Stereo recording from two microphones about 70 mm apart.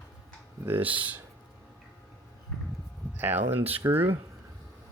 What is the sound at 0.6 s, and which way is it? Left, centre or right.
Speech, right.